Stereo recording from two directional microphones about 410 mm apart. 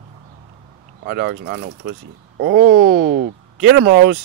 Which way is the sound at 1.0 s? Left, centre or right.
Right.